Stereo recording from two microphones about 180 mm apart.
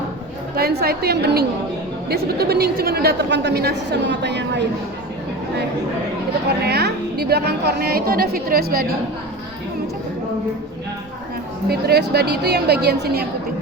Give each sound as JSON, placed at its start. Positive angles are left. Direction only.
{"t": 0.5, "sound": "a woman's voice", "side_deg": -60}
{"t": 6.7, "sound": "a woman's voice", "side_deg": -65}
{"t": 11.7, "sound": "a woman's voice", "side_deg": -60}